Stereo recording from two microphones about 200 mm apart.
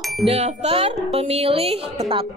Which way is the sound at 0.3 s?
35° right (ahead or behind).